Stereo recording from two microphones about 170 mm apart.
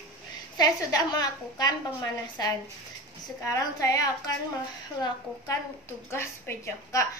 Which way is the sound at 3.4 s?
20° left (ahead or behind).